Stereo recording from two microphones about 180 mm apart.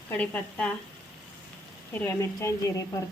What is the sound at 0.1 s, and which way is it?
Speech, 10° left (ahead or behind).